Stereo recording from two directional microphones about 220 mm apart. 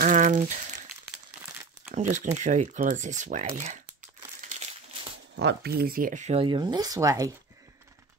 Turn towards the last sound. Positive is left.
turn(degrees=-15)  # may be behind; listen again after turning